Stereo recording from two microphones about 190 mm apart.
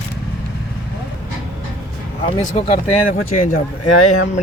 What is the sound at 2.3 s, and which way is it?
Speech, 30° left (ahead or behind).